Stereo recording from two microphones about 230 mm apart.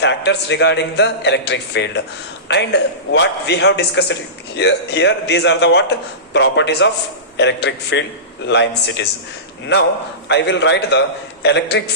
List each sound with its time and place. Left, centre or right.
0.0 s a man's voice: left